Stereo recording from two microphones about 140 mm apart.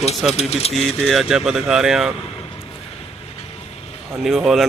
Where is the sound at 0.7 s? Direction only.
Centre (ahead or behind).